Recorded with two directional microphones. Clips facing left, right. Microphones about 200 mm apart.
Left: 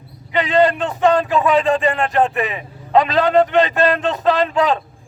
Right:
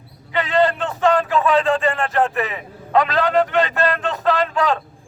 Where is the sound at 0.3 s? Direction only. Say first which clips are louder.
Left 3 dB; 15° left (ahead or behind).